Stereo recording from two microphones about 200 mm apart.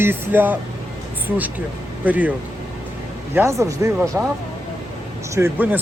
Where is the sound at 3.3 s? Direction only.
15° right (ahead or behind).